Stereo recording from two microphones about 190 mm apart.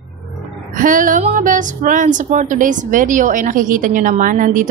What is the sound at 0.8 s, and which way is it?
A woman's voice, 45° right (ahead or behind).